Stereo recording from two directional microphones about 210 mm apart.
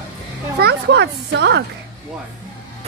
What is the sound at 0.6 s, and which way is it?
A woman's voice, 50° right (ahead or behind).